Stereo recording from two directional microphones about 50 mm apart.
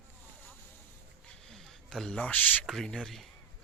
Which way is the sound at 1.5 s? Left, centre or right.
Centre.